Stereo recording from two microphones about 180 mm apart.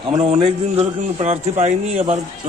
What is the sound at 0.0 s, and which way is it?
A man's voice, 30° right (ahead or behind).